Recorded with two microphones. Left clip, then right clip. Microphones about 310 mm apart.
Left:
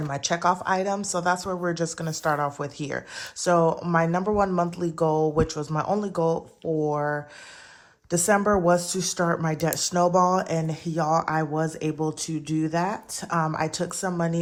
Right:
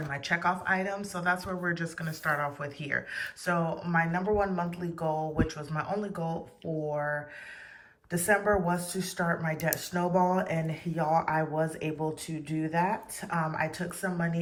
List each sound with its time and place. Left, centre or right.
0.1 s a woman's voice: centre
8.1 s a woman's voice: centre